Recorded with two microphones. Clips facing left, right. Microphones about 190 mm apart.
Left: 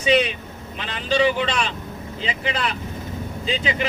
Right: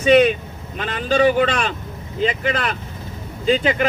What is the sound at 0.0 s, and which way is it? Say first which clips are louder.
Speech: right 6 dB; 50° right (ahead or behind).